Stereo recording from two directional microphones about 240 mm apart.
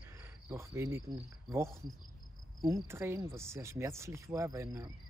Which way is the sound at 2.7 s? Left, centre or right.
Centre.